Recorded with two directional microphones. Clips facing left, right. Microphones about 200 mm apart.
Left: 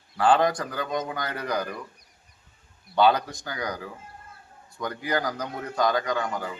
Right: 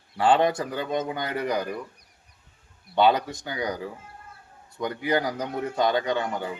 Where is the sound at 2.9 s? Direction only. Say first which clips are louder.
Even; 20° right (ahead or behind).